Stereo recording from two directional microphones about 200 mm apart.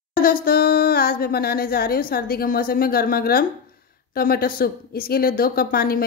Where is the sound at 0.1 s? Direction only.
45° left (ahead or behind).